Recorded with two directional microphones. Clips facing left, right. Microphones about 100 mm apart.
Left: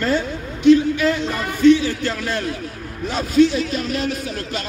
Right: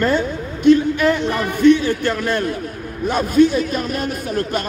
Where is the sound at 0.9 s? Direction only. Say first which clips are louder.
Right 3 dB; 50° right (ahead or behind).